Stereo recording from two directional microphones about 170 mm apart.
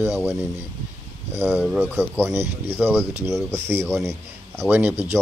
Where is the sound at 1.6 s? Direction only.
5° right (ahead or behind).